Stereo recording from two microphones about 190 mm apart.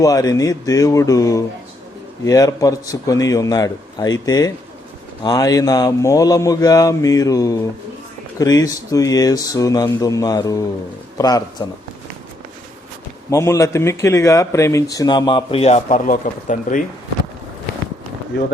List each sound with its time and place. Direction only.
0.0 s speech: 20° left (ahead or behind)
13.3 s speech: 15° left (ahead or behind); by 16.8 s 45° left (ahead or behind)